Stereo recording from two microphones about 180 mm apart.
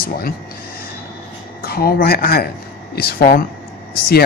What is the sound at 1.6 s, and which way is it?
Speech, 60° left (ahead or behind).